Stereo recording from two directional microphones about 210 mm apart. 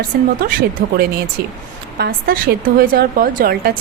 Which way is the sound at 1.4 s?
50° right (ahead or behind).